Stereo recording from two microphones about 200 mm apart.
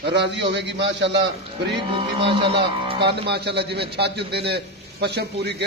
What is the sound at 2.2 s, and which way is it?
Speech, 25° right (ahead or behind).